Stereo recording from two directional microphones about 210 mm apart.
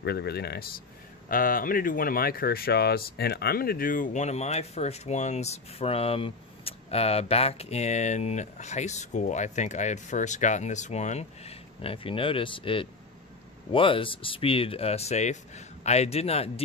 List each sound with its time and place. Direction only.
0.0 s speech: 50° left (ahead or behind); by 16.6 s 30° left (ahead or behind)